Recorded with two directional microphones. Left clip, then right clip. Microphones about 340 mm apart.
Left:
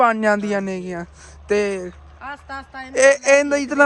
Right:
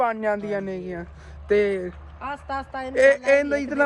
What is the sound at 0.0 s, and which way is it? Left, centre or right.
A man's voice, left.